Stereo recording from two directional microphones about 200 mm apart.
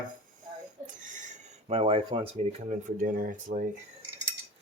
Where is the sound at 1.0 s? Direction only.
40° right (ahead or behind).